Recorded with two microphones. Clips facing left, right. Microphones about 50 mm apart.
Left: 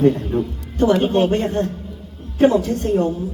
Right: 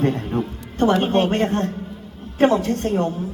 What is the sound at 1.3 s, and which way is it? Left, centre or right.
A woman's voice, right.